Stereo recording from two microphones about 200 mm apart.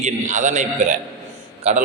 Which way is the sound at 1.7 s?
35° right (ahead or behind).